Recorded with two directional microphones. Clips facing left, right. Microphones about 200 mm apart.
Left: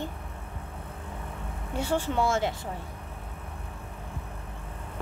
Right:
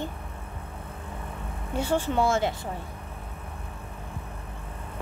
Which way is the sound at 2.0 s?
30° right (ahead or behind).